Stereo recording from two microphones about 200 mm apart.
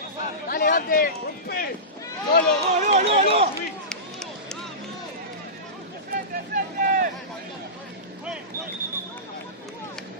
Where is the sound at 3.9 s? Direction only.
5° left (ahead or behind).